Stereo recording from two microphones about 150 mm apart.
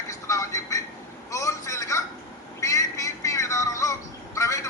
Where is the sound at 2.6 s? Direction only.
20° left (ahead or behind).